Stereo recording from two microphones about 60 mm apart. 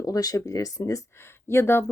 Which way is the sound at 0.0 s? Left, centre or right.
Left.